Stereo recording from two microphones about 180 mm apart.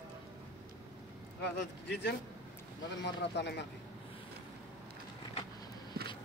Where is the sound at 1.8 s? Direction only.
70° left (ahead or behind).